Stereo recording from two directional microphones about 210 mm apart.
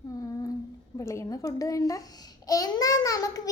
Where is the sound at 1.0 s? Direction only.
15° left (ahead or behind).